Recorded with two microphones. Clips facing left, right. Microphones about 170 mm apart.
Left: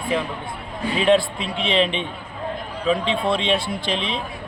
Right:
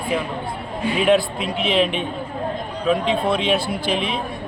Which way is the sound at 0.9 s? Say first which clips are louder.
Even; 5° right (ahead or behind).